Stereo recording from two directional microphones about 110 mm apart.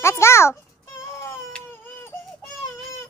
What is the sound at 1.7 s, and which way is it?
Baby cry, 20° left (ahead or behind).